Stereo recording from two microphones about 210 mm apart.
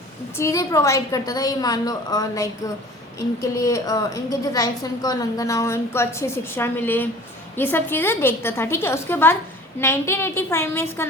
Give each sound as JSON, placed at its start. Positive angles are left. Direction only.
{"t": 0.3, "sound": "a woman's voice", "side_deg": 15}